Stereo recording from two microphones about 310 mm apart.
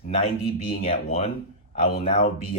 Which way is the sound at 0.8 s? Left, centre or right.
Left.